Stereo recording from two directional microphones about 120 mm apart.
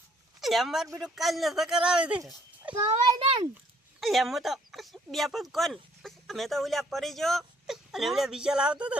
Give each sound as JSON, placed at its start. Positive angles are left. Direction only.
{"t": 0.3, "sound": "speech", "side_deg": 0}
{"t": 2.8, "sound": "a child's voice", "side_deg": -55}
{"t": 4.0, "sound": "speech", "side_deg": 0}